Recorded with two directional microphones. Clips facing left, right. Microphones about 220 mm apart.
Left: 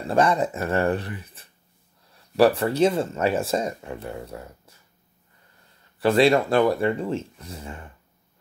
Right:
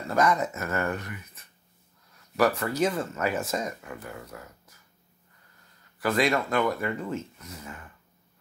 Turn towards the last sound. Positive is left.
turn(degrees=30)  # may be behind; listen again after turning